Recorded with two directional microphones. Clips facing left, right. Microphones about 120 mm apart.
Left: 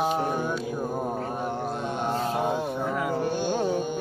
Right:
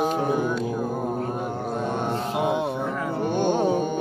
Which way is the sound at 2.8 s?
10° left (ahead or behind).